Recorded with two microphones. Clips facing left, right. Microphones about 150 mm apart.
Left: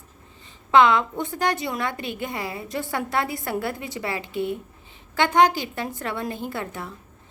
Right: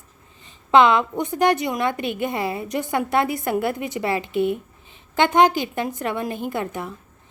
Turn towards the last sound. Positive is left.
turn(degrees=-20)  # may be behind; listen again after turning